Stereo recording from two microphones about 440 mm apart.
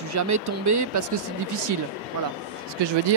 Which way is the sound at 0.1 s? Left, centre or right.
Right.